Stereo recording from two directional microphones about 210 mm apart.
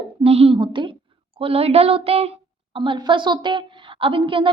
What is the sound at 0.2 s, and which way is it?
A woman's voice, 25° right (ahead or behind).